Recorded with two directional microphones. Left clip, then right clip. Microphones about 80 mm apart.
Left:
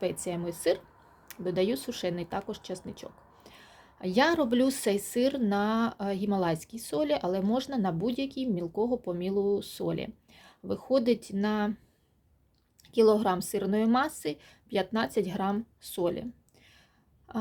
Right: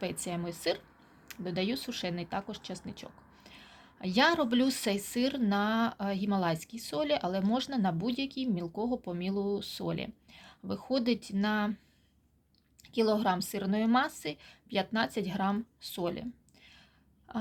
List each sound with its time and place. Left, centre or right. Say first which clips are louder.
0.0 s speech: left 4 dB; left
12.9 s a woman's voice: left 5 dB; left
17.3 s a sound: left 2 dB; left